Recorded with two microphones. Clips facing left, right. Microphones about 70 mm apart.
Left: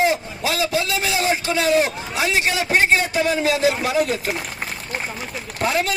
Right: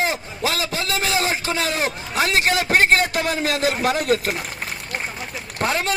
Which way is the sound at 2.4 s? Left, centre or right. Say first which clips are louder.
Right 2 dB; right.